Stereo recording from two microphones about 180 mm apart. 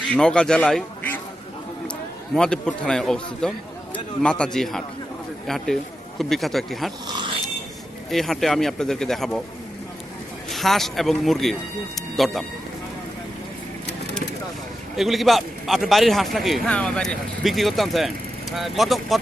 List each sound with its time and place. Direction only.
0.1 s a man's voice: 5° left (ahead or behind)
7.1 s a sound: 25° right (ahead or behind)
8.1 s a man's voice: centre (ahead or behind)
10.5 s a man's voice: centre (ahead or behind)
14.9 s a man's voice: centre (ahead or behind)